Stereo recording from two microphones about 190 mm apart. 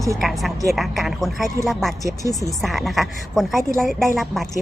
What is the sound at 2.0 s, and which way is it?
Speech, 20° left (ahead or behind).